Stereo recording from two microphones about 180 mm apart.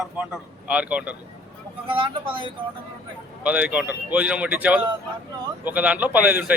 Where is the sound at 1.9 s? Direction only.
30° right (ahead or behind).